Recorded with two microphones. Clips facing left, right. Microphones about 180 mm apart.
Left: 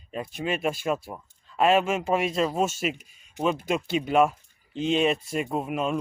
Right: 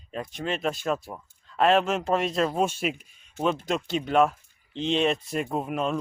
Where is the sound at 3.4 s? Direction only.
15° left (ahead or behind).